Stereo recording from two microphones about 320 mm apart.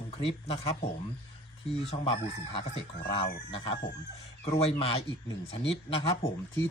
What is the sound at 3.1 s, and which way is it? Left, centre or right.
Speech, centre.